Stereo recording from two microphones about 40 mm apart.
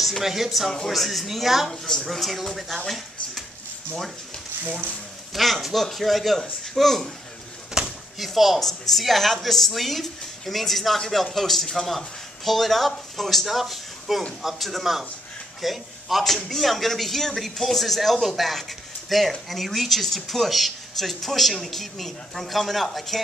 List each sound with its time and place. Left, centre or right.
0.2 s speech: centre
5.3 s speech: centre
7.8 s a sound: centre
8.2 s a man's voice: centre